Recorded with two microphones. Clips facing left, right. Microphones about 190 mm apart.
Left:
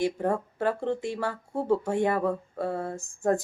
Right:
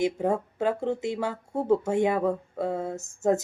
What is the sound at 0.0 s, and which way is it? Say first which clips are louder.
A woman's voice: right 1 dB; 10° right (ahead or behind).